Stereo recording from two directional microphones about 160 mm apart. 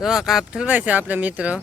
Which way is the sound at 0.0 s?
Centre (ahead or behind).